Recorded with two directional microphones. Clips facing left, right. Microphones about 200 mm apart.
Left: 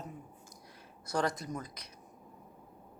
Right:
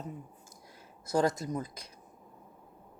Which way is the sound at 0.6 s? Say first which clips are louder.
Even; 25° right (ahead or behind).